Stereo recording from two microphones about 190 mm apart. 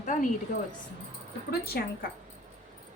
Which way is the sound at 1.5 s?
55° left (ahead or behind).